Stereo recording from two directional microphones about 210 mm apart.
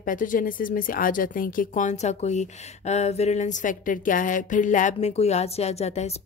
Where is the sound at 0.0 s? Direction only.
40° left (ahead or behind).